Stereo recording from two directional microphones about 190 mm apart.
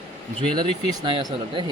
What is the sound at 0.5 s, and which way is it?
Speech, 25° right (ahead or behind).